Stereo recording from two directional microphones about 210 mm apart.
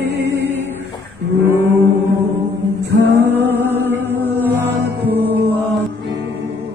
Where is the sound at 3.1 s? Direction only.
10° right (ahead or behind).